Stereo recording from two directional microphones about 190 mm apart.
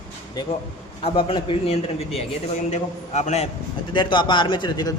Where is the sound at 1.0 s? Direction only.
25° left (ahead or behind).